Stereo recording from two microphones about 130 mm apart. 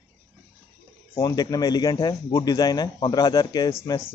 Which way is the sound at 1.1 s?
30° left (ahead or behind).